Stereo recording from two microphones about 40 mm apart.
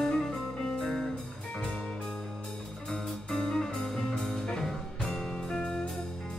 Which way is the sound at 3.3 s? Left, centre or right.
Centre.